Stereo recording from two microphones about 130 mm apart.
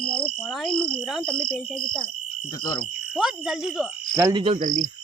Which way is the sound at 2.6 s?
30° left (ahead or behind).